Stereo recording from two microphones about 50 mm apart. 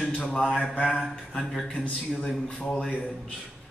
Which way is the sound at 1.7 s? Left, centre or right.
Left.